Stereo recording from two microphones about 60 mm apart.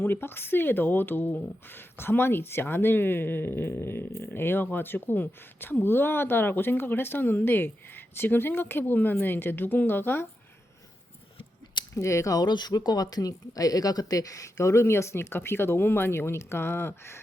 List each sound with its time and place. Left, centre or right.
0.0 s speech: left
11.9 s speech: left